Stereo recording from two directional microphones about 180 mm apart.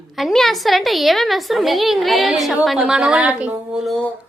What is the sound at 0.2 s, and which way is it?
A woman's voice, centre (ahead or behind).